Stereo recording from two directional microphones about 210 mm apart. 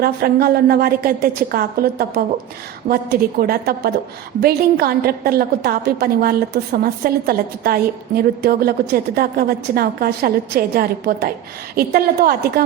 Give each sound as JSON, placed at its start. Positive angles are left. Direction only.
{"t": 0.0, "sound": "a woman's voice", "side_deg": -45}